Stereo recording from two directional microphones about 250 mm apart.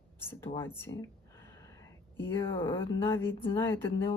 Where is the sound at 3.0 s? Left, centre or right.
Centre.